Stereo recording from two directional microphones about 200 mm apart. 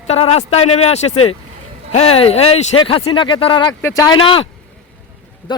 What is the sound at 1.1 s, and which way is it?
Speech, 90° left.